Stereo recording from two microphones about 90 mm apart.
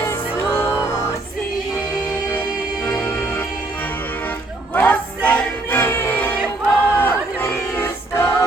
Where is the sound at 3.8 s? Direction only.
20° left (ahead or behind).